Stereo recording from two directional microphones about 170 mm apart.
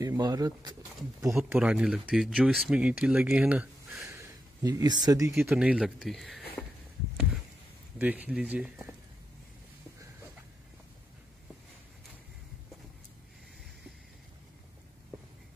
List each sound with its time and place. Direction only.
0.0 s speech: 20° right (ahead or behind)
1.3 s speech: 5° right (ahead or behind); by 5.3 s 20° right (ahead or behind)
5.5 s speech: 5° right (ahead or behind)
8.0 s speech: 10° right (ahead or behind)